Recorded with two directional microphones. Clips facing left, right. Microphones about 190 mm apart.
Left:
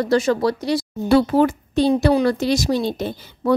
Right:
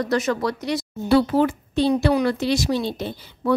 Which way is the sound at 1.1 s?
45° left (ahead or behind).